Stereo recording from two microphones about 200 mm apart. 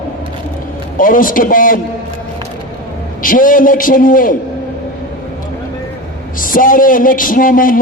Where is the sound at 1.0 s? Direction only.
45° left (ahead or behind).